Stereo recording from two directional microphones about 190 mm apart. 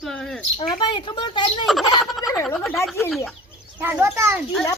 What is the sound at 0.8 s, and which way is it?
Speech, 25° left (ahead or behind).